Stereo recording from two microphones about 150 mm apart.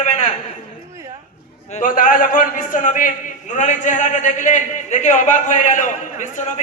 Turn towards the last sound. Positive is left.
turn(degrees=55)  # may be behind; listen again after turning